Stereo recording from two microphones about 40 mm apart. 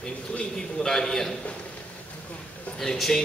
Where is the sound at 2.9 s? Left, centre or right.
Centre.